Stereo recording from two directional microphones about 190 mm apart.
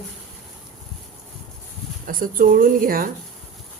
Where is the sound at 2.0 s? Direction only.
45° right (ahead or behind).